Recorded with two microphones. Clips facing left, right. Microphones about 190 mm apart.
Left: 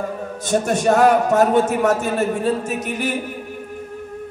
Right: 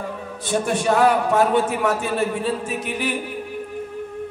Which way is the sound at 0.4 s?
45° left (ahead or behind).